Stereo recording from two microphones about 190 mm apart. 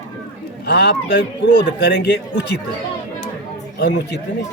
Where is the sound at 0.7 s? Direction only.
60° left (ahead or behind).